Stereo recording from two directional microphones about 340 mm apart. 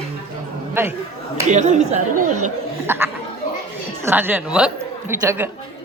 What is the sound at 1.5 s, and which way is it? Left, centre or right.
Speech, right.